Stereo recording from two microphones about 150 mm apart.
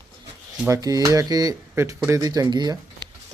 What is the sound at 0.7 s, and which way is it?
Speech, 25° right (ahead or behind).